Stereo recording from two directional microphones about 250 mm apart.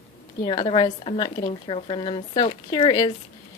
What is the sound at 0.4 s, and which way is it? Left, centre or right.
Speech, left.